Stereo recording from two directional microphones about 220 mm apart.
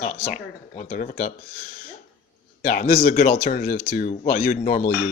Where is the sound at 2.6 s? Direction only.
40° left (ahead or behind).